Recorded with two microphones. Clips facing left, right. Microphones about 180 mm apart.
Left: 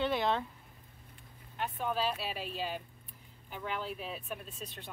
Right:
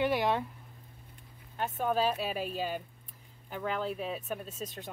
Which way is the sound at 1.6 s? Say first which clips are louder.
Right 4 dB; 45° right (ahead or behind).